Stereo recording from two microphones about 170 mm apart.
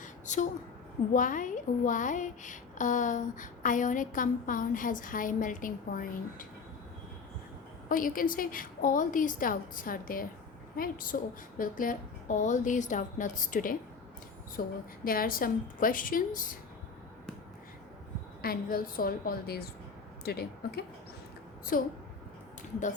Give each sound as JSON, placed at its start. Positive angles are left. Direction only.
{"t": 0.0, "sound": "a sound", "side_deg": 45}
{"t": 1.1, "sound": "a woman's voice", "side_deg": 50}
{"t": 7.9, "sound": "a woman's voice", "side_deg": 55}
{"t": 18.4, "sound": "a woman's voice", "side_deg": 60}
{"t": 21.7, "sound": "a woman's voice", "side_deg": 55}